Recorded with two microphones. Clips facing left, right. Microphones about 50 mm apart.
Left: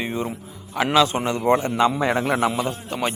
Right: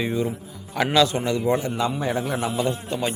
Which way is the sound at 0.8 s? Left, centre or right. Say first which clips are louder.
Left 1 dB; centre.